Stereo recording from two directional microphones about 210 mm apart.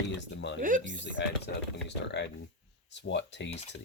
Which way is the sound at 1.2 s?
55° left (ahead or behind).